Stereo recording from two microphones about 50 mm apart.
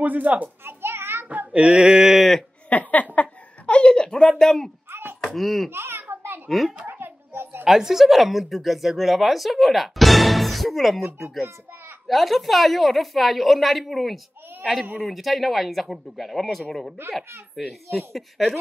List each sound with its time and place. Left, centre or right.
0.0 s a child's voice: right
0.7 s children playing: right
1.5 s a sound: right
2.7 s a sound: left; by 4.6 s centre
5.2 s speech: centre
5.7 s a child's voice: right
5.9 s a sound: right
7.6 s speech: centre
12.1 s speech: centre
17.0 s a child's voice: right
17.9 s speech: centre